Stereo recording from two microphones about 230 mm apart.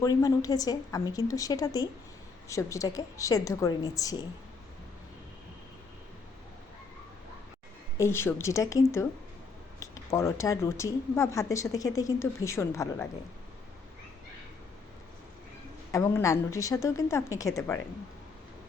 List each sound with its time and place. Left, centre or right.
0.0 s speech: centre
7.9 s speech: centre
15.9 s speech: centre